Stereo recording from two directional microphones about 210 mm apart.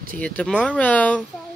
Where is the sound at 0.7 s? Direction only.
5° left (ahead or behind).